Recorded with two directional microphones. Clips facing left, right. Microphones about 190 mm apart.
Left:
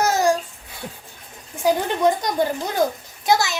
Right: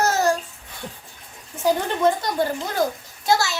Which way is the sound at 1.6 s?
15° left (ahead or behind).